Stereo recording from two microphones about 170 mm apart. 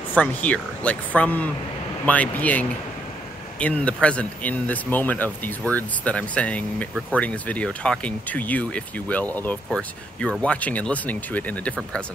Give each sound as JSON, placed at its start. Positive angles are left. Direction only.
{"t": 0.1, "sound": "speech", "side_deg": 10}